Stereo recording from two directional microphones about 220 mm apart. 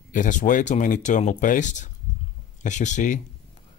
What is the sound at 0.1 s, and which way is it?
Speech, 35° left (ahead or behind).